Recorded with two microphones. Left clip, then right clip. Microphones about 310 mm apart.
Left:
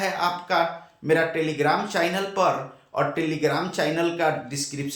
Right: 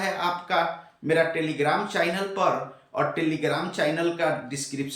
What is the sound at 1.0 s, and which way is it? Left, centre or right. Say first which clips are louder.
Speech: left 1 dB; centre.